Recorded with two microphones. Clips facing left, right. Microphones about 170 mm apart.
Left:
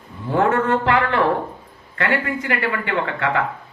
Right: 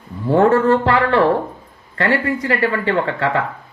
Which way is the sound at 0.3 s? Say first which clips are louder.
Right 5 dB; 35° right (ahead or behind).